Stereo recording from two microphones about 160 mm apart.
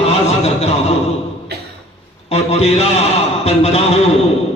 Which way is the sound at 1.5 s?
90° right.